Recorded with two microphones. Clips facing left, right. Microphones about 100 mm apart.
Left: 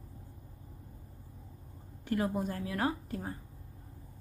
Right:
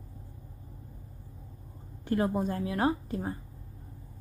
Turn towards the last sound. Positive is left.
turn(degrees=-20)  # may be behind; listen again after turning